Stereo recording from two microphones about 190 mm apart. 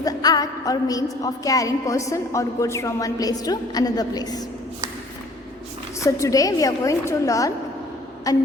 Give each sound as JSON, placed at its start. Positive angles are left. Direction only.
{"t": 0.0, "sound": "a woman's voice", "side_deg": 20}
{"t": 6.0, "sound": "a woman's voice", "side_deg": 15}